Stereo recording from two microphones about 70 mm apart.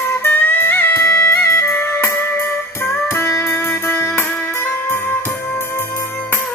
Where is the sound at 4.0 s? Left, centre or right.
Left.